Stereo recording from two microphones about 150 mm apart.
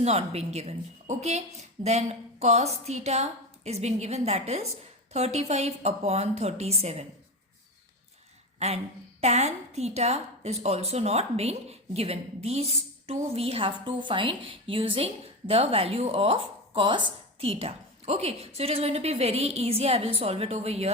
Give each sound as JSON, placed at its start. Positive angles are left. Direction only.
{"t": 0.0, "sound": "a woman's voice", "side_deg": -45}
{"t": 8.5, "sound": "a woman's voice", "side_deg": -45}